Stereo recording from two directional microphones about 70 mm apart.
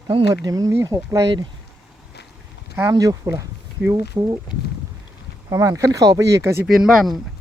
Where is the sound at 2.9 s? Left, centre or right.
Right.